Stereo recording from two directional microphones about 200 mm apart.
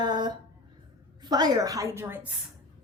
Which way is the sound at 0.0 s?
20° right (ahead or behind).